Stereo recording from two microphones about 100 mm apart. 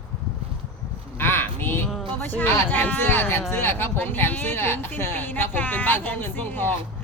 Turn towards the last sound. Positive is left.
turn(degrees=20)  # may be behind; listen again after turning